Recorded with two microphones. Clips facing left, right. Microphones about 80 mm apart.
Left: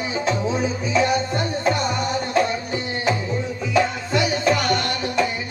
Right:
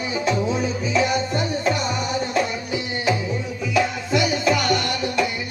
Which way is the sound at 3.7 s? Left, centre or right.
Centre.